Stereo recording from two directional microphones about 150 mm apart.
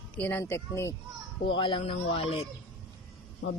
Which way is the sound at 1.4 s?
35° left (ahead or behind).